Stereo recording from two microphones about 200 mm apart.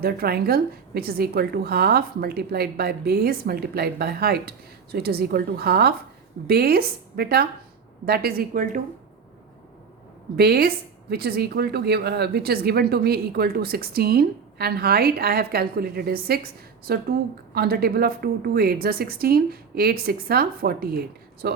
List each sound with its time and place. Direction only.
0.0 s speech: 50° right (ahead or behind)
10.3 s speech: 50° right (ahead or behind)